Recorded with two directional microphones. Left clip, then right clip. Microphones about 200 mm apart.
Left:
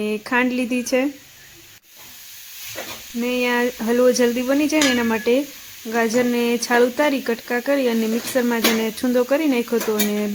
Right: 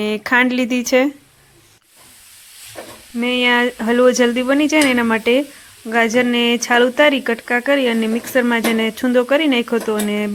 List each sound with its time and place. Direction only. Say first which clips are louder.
0.0 s speech: right 5 dB; 20° right (ahead or behind)
3.2 s speech: right 5 dB; 15° right (ahead or behind)